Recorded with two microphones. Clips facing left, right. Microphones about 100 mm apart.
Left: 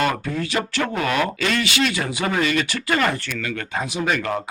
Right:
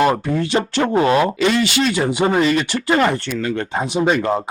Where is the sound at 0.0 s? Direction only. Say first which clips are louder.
Right 6 dB; 30° right (ahead or behind).